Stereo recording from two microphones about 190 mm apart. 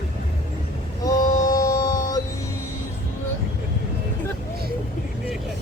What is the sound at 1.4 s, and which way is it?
Music, 20° left (ahead or behind).